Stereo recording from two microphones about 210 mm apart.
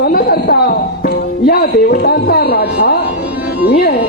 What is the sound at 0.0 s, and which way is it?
Music, 45° left (ahead or behind).